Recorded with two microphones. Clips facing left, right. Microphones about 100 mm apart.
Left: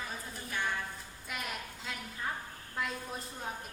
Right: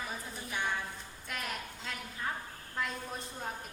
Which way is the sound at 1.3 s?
5° left (ahead or behind).